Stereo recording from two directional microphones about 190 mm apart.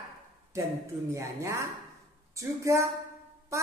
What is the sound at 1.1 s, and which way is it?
A woman's voice, 15° right (ahead or behind).